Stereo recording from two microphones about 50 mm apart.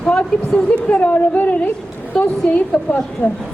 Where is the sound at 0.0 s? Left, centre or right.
Centre.